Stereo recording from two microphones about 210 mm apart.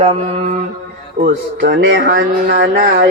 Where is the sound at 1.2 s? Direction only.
50° right (ahead or behind).